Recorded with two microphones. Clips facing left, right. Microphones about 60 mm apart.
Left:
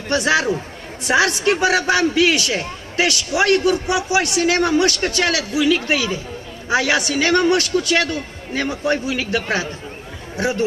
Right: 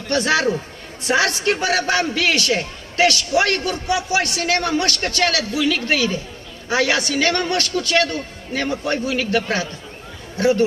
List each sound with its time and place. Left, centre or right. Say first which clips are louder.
0.1 s a man's voice: left 1 dB; left